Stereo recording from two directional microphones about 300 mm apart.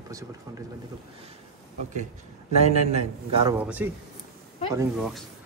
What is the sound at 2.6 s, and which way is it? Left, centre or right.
Speech, right.